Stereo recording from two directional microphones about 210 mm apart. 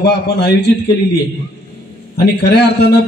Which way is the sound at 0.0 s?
50° left (ahead or behind).